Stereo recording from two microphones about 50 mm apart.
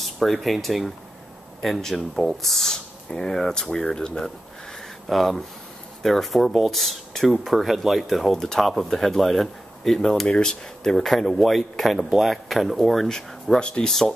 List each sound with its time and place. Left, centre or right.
0.0 s speech: centre
5.0 s speech: centre
13.6 s speech: centre
13.8 s speech: centre